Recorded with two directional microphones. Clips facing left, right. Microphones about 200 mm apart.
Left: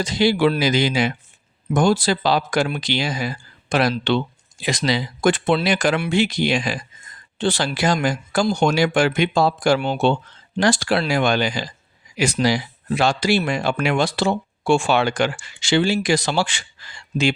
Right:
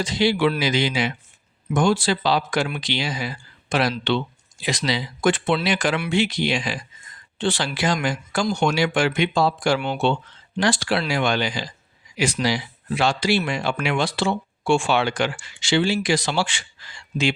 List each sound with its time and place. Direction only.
0.0 s speech: 40° left (ahead or behind)